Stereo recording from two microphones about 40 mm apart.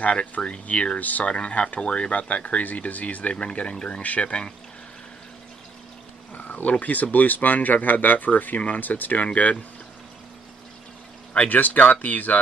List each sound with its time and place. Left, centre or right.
0.0 s speech: left
0.9 s speech: left
1.2 s speech: left
3.3 s speech: left
6.3 s speech: left
9.2 s speech: left
11.3 s speech: left